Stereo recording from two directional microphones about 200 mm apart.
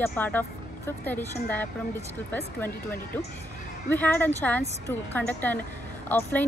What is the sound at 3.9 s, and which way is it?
Speech, 10° left (ahead or behind).